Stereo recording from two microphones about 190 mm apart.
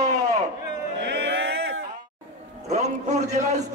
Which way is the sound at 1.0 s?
65° right (ahead or behind).